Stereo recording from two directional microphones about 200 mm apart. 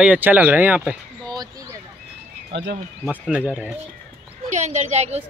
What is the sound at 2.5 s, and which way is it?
Speech, 60° right (ahead or behind).